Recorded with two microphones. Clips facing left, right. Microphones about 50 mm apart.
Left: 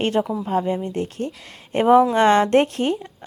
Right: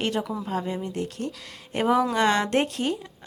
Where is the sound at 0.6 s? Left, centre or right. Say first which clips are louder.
Left 7 dB; centre.